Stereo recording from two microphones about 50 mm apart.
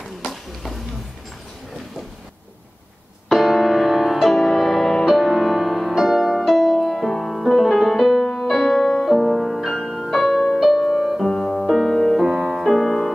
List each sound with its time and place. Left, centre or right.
3.3 s music: centre